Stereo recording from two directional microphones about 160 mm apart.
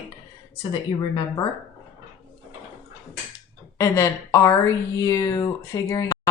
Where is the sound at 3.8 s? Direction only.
20° left (ahead or behind).